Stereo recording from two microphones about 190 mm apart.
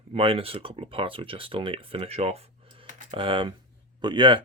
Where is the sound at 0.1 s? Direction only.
30° right (ahead or behind).